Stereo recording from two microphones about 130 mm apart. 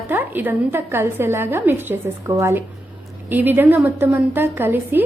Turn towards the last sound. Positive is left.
turn(degrees=-15)  # may be behind; listen again after turning